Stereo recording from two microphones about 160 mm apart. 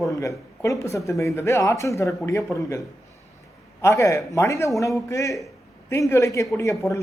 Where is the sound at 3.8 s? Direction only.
20° left (ahead or behind).